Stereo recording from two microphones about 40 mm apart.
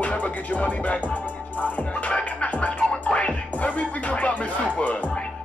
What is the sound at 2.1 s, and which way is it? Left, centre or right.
Music, left.